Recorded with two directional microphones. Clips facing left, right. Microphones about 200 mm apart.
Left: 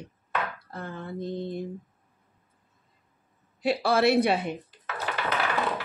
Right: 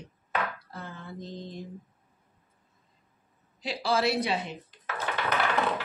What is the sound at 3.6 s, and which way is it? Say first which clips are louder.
Speech: left 5 dB; 60° left (ahead or behind).